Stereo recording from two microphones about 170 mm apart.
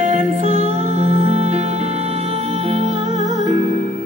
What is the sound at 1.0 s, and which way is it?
Music, 35° right (ahead or behind).